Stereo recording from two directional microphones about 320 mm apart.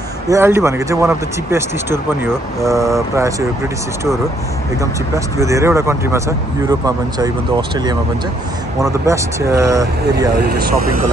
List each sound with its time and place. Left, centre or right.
0.3 s speech: centre
5.1 s speech: centre
10.3 s speech: right